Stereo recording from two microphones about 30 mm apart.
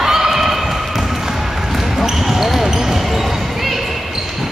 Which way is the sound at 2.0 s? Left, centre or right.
Centre.